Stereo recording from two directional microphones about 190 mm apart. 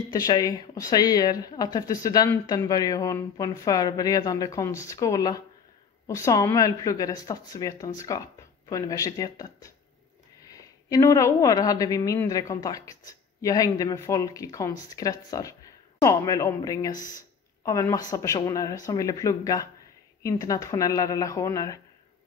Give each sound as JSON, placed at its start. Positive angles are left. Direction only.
{"t": 0.1, "sound": "a woman's voice", "side_deg": 20}
{"t": 16.9, "sound": "speech", "side_deg": 45}
{"t": 17.6, "sound": "a woman's voice", "side_deg": 15}